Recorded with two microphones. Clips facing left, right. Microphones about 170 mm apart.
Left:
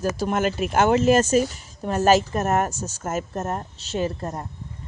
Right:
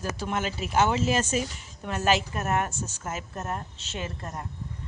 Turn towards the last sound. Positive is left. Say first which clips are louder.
# left 9 dB
turn(degrees=35)  # may be behind; listen again after turning